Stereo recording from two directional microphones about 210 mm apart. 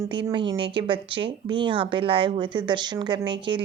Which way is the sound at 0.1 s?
20° right (ahead or behind).